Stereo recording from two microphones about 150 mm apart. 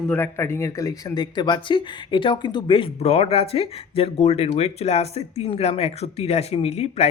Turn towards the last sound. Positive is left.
turn(degrees=45)  # may be behind; listen again after turning